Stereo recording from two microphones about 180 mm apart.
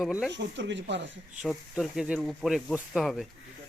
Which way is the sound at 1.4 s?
Centre (ahead or behind).